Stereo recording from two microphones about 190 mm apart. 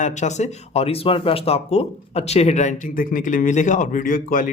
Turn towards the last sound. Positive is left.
turn(degrees=45)  # may be behind; listen again after turning